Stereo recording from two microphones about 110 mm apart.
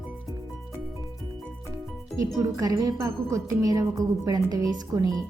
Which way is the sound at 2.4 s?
35° right (ahead or behind).